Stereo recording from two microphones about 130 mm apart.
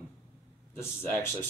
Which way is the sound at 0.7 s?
20° left (ahead or behind).